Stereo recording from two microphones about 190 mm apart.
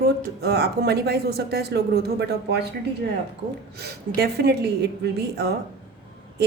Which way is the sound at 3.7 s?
55° right (ahead or behind).